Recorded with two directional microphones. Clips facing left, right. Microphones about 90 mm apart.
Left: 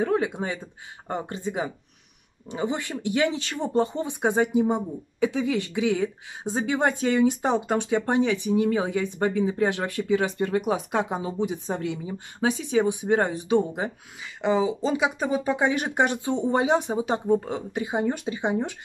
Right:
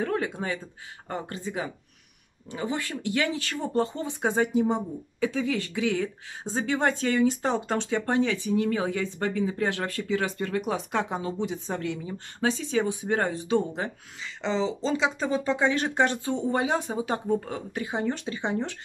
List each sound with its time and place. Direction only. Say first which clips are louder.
0.0 s speech: left 4 dB; 20° left (ahead or behind)